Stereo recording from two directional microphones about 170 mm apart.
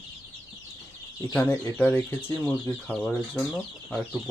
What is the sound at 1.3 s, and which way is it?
Speech, 10° left (ahead or behind).